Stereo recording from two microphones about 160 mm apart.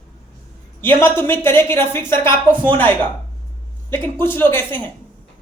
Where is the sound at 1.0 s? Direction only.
15° left (ahead or behind).